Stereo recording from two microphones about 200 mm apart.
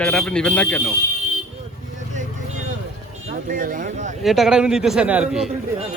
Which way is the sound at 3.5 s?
40° right (ahead or behind).